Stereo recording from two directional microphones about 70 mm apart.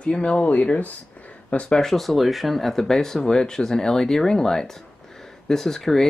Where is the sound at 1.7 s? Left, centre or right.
Centre.